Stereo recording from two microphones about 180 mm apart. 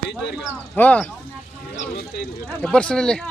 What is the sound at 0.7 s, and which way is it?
Speech, 10° left (ahead or behind).